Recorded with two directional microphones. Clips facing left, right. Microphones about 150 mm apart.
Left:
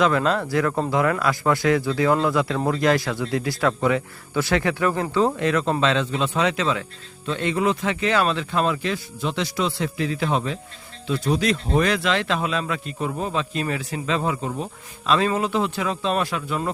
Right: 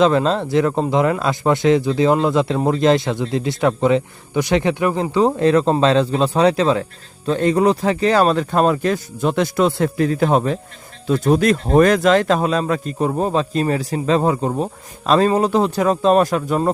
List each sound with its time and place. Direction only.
0.0 s speech: 25° right (ahead or behind)
5.4 s speech: 35° right (ahead or behind)